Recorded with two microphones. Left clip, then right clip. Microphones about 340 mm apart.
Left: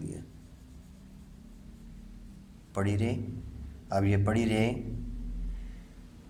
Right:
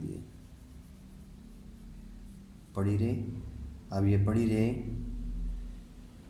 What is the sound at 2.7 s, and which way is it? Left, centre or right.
A man's voice, left.